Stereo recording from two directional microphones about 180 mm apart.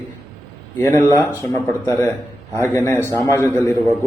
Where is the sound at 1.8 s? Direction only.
15° left (ahead or behind).